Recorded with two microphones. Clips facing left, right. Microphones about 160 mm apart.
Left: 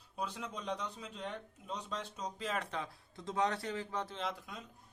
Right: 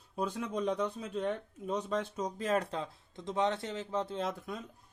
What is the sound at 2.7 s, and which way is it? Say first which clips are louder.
Speech: right 3 dB; 20° right (ahead or behind).